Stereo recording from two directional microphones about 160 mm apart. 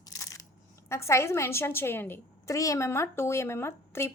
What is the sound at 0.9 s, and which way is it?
Speech, 15° left (ahead or behind).